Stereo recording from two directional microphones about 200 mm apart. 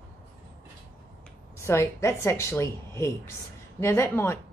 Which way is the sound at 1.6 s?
15° left (ahead or behind).